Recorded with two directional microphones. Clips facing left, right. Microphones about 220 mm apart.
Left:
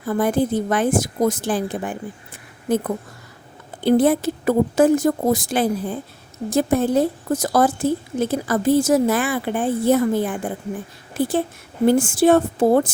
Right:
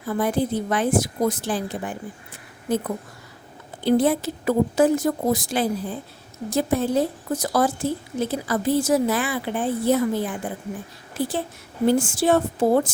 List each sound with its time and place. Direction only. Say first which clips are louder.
0.0 s a woman's voice: left 3 dB; 50° left (ahead or behind)